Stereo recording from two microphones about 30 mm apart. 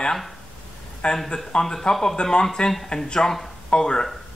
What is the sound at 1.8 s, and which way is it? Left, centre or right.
Speech, left.